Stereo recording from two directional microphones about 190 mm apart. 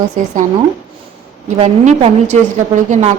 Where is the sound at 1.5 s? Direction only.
35° right (ahead or behind).